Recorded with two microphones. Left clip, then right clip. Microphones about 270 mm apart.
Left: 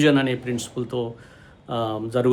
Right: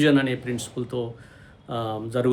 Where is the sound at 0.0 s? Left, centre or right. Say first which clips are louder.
Left 1 dB; centre.